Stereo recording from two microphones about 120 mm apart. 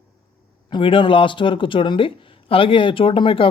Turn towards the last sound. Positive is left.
turn(degrees=45)  # may be behind; listen again after turning